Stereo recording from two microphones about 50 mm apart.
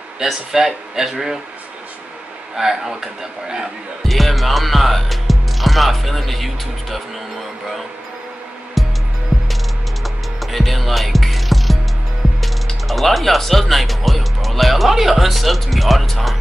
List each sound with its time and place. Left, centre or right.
0.2 s speech: centre
2.5 s speech: centre
4.0 s speech: centre
8.8 s music: centre
9.3 s music: right
10.0 s music: centre
12.8 s speech: centre